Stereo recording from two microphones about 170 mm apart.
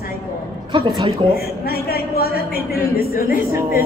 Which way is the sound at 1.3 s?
60° left (ahead or behind).